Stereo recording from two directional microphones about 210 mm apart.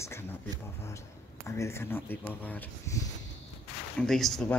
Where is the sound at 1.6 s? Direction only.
10° left (ahead or behind).